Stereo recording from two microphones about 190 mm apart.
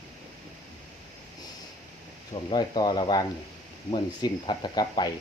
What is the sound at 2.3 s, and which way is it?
Speech, 25° left (ahead or behind).